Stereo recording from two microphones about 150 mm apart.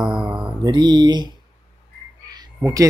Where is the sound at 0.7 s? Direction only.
30° right (ahead or behind).